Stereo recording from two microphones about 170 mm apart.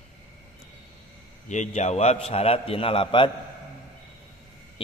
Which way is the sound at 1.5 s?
45° left (ahead or behind).